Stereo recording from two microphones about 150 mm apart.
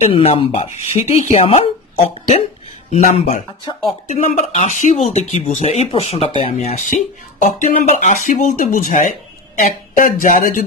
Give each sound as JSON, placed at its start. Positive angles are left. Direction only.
{"t": 0.0, "sound": "speech", "side_deg": 45}
{"t": 2.9, "sound": "speech", "side_deg": 50}